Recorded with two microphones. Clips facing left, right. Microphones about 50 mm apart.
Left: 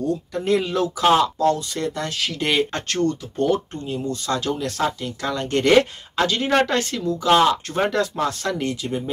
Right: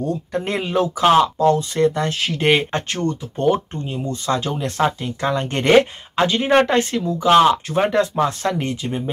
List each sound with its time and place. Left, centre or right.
0.0 s speech: right
7.6 s speech: centre
7.9 s speech: right